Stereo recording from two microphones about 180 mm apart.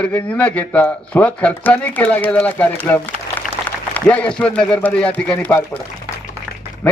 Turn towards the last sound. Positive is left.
turn(degrees=5)  # may be behind; listen again after turning